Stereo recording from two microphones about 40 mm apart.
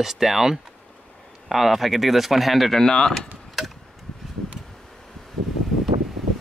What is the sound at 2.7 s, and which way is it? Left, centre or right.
Speech, centre.